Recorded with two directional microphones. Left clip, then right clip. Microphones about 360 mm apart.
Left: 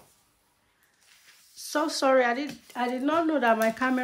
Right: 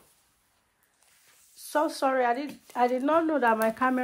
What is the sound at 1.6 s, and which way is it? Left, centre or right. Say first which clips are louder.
Speech: even; centre.